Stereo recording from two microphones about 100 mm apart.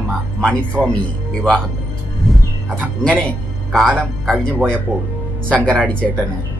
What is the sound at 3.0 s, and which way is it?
A man's voice, 10° left (ahead or behind).